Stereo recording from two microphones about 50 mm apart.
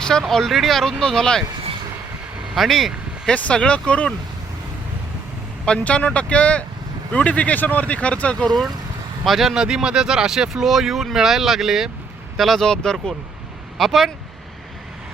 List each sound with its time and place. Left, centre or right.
0.0 s speech: centre
2.6 s speech: centre
3.5 s speech: left
5.8 s speech: left
9.2 s speech: centre
12.4 s speech: centre
13.7 s speech: centre